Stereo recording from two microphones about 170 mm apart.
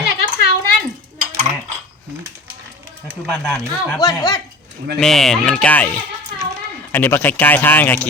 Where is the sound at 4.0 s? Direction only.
20° left (ahead or behind).